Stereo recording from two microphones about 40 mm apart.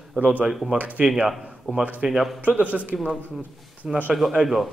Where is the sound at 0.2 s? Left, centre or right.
Right.